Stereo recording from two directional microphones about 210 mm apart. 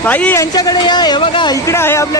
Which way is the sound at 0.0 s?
10° left (ahead or behind).